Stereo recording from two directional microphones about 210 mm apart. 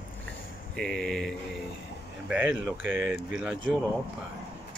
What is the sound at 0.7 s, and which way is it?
Speech, 5° left (ahead or behind).